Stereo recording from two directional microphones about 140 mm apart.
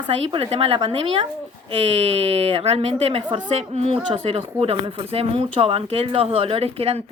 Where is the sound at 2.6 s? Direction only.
45° right (ahead or behind).